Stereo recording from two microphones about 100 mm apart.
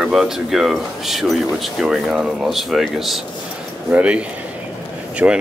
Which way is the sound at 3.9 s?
10° right (ahead or behind).